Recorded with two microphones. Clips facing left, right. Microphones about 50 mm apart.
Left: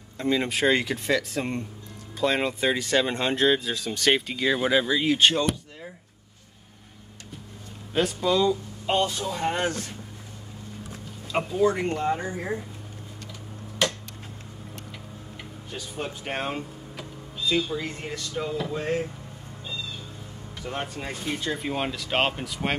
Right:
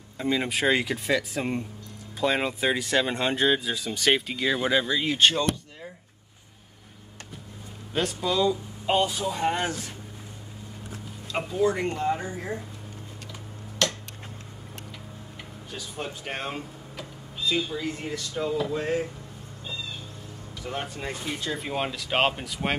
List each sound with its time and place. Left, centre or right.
0.2 s speech: centre
7.9 s speech: centre
11.4 s speech: centre
13.8 s a sound: centre
15.7 s speech: centre
20.6 s speech: centre